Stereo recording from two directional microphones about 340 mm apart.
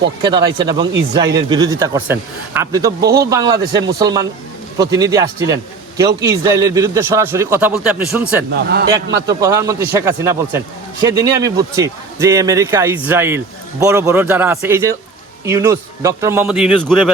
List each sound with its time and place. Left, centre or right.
0.2 s speech: centre